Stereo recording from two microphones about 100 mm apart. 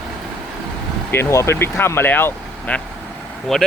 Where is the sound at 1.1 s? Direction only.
25° left (ahead or behind).